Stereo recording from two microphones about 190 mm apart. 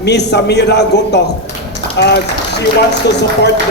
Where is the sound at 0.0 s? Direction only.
65° left (ahead or behind).